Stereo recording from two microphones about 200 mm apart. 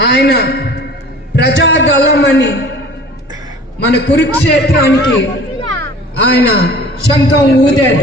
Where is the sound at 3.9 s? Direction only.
60° left (ahead or behind).